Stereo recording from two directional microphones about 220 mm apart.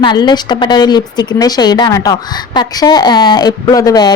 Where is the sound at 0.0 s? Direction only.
20° left (ahead or behind).